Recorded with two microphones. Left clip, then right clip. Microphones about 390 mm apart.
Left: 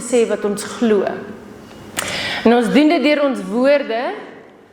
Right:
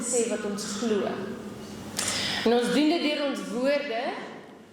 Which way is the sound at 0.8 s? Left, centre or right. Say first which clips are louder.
Left 12 dB; left.